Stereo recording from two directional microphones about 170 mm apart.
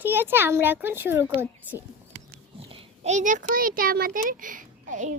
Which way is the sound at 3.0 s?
45° right (ahead or behind).